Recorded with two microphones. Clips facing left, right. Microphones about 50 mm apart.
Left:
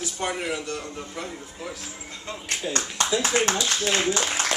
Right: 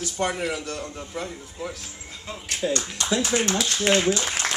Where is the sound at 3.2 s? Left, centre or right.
Left.